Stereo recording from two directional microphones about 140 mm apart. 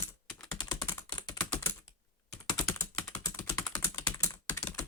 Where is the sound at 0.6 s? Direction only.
25° left (ahead or behind).